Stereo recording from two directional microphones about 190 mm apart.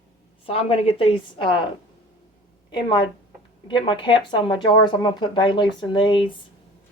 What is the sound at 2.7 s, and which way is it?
Speech, 25° left (ahead or behind).